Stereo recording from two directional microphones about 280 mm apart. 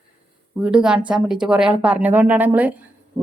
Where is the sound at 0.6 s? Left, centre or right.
Centre.